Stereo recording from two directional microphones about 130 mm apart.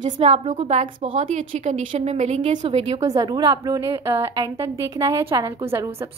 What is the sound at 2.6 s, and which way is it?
Speech, 40° right (ahead or behind).